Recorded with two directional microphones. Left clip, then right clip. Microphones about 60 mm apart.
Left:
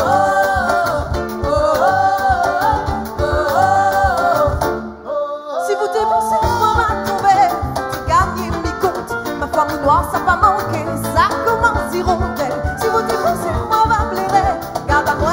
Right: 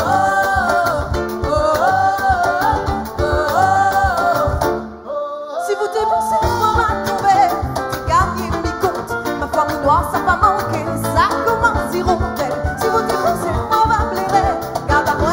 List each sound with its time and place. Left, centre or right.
0.0 s music: right
9.6 s music: right